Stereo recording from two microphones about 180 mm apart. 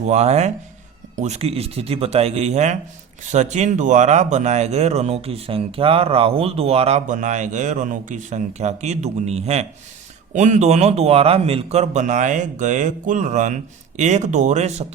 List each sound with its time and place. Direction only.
0.0 s speech: 35° right (ahead or behind)